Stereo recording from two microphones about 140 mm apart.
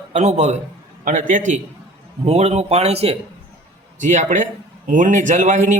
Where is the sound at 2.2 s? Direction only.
50° right (ahead or behind).